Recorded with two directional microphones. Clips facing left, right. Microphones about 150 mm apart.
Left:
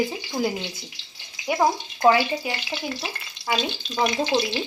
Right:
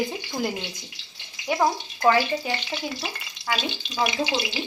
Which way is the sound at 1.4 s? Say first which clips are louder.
Left 1 dB; 15° left (ahead or behind).